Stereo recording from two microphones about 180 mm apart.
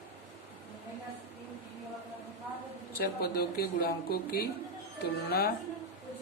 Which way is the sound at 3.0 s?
60° left (ahead or behind).